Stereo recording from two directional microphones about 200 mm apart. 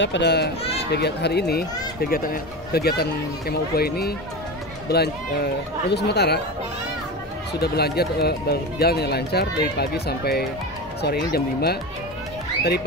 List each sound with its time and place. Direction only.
0.0 s a child's voice: 60° left (ahead or behind)
7.6 s speech: 55° left (ahead or behind)